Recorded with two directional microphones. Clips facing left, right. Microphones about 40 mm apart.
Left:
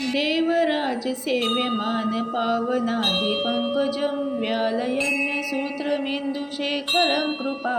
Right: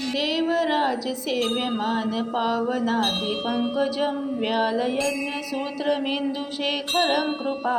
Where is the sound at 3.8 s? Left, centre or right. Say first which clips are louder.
Left 1 dB; centre.